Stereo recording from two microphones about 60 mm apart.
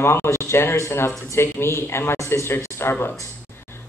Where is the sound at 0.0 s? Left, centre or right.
Left.